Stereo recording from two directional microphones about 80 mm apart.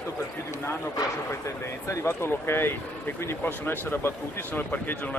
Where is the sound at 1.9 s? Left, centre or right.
Left.